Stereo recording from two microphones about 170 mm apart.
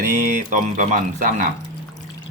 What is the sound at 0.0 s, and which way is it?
Speech, 50° right (ahead or behind).